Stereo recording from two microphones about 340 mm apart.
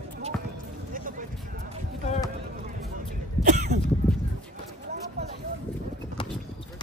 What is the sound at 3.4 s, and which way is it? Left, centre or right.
Throat clearing, right.